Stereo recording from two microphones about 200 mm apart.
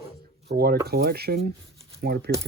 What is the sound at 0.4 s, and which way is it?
Speech, 50° right (ahead or behind).